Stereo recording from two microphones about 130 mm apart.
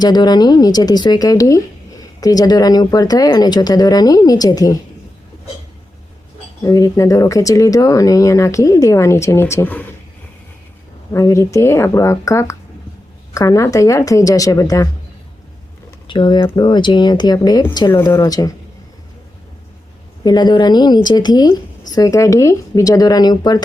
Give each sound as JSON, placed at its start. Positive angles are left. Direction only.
{"t": 0.0, "sound": "speech", "side_deg": 30}
{"t": 6.6, "sound": "speech", "side_deg": 25}
{"t": 11.1, "sound": "speech", "side_deg": 25}
{"t": 16.0, "sound": "speech", "side_deg": 35}
{"t": 20.2, "sound": "speech", "side_deg": 35}